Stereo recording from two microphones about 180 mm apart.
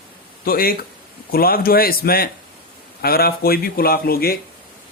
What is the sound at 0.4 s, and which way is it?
Speech, 55° left (ahead or behind).